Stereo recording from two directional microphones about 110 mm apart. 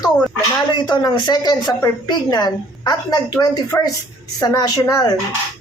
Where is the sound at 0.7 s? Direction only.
40° left (ahead or behind).